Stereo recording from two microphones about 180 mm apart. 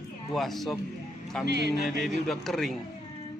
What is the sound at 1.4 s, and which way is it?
Music, 70° right (ahead or behind).